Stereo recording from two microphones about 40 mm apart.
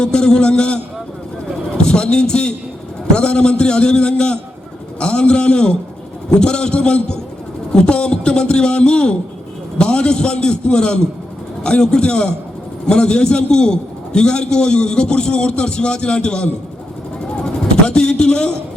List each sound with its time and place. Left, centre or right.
0.0 s a man's voice: left
1.8 s a man's voice: left
17.8 s a man's voice: left